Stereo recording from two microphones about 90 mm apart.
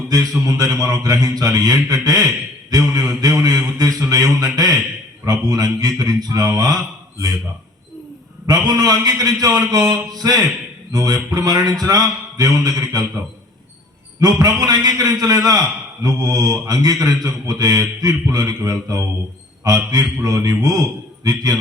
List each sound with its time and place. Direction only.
0.1 s a man's voice: 40° right (ahead or behind)
8.4 s a man's voice: 45° right (ahead or behind)
14.2 s a man's voice: 45° right (ahead or behind)